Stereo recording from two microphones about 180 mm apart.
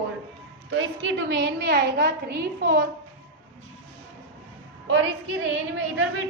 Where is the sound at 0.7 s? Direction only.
85° right.